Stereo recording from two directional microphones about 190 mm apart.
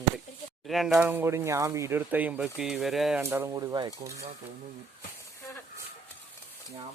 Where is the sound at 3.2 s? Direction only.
10° right (ahead or behind).